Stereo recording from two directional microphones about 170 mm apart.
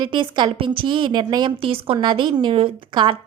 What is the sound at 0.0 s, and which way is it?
Speech, 25° right (ahead or behind).